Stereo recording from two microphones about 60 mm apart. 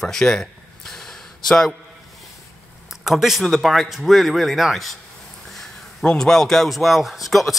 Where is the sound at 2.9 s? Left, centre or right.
Centre.